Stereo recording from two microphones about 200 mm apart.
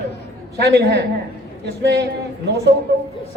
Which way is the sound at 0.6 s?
55° right (ahead or behind).